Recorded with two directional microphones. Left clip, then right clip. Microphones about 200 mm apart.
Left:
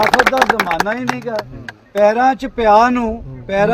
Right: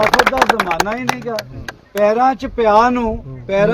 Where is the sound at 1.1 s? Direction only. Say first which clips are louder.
Right 1 dB; 55° right (ahead or behind).